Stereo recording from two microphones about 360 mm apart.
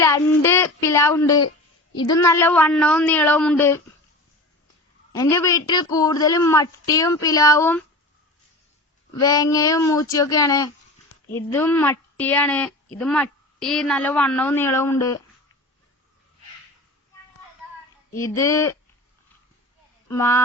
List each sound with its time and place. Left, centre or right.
0.0 s speech: centre
5.1 s speech: centre
9.1 s speech: centre
18.2 s speech: centre
20.1 s speech: centre